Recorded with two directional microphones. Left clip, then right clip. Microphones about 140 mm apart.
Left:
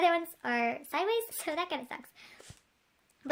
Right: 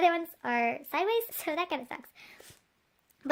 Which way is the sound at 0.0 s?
25° right (ahead or behind).